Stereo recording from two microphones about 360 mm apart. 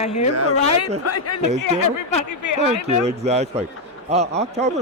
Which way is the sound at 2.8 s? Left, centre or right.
Centre.